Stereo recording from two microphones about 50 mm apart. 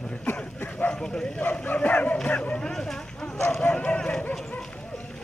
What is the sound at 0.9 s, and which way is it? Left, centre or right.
Speech, centre.